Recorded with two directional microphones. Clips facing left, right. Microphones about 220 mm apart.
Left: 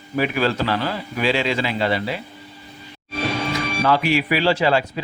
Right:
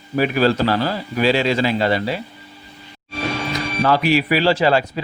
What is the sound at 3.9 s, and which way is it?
Speech, 40° right (ahead or behind).